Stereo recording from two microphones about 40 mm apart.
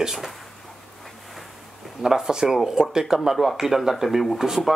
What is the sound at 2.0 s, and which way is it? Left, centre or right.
Speech, centre.